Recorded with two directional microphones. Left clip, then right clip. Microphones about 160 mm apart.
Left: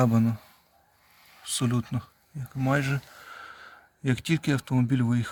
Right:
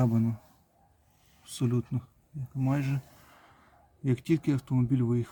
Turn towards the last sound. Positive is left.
turn(degrees=10)  # may be behind; listen again after turning